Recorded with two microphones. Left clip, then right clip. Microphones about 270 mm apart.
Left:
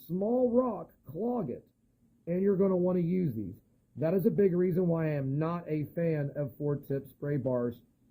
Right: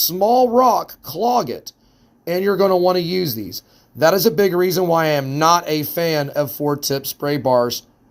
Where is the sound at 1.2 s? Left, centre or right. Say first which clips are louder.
Right 17 dB; centre.